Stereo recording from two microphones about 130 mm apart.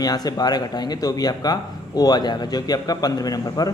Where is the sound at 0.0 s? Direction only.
30° left (ahead or behind).